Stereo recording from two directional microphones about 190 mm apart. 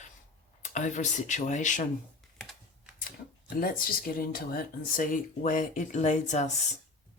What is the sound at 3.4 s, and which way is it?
Speech, 50° left (ahead or behind).